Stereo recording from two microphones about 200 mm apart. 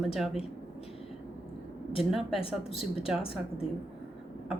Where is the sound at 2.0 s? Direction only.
Centre (ahead or behind).